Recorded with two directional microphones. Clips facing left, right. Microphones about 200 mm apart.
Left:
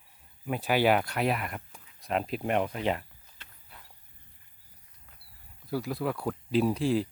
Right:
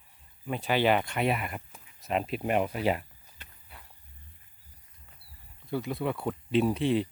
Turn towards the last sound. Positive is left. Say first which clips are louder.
# even
turn(degrees=0)  # may be behind; listen again after turning